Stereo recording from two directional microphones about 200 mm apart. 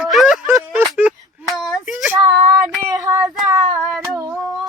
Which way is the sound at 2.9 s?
15° right (ahead or behind).